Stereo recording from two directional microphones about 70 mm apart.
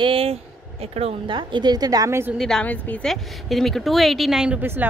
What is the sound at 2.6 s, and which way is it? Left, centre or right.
Speech, left.